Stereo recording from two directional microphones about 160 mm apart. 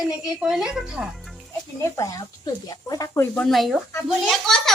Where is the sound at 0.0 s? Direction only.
Centre (ahead or behind).